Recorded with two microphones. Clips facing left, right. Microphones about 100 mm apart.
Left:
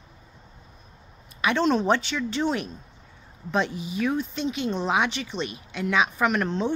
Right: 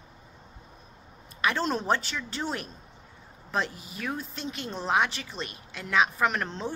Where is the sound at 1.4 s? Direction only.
5° right (ahead or behind).